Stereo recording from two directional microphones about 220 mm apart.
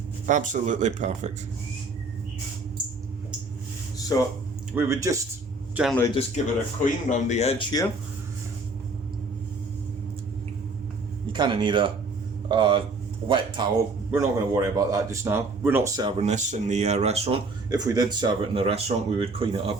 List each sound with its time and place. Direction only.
0.3 s speech: 35° right (ahead or behind)
4.1 s speech: 15° left (ahead or behind)
4.7 s speech: 10° right (ahead or behind)
5.7 s speech: centre (ahead or behind)
6.1 s speech: 25° left (ahead or behind)
11.3 s a man's voice: 20° right (ahead or behind)
17.8 s a man's voice: 15° right (ahead or behind)